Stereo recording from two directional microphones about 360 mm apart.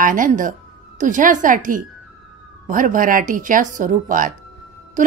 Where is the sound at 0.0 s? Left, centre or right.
Right.